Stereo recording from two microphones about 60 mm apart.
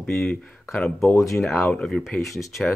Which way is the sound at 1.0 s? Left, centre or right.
Left.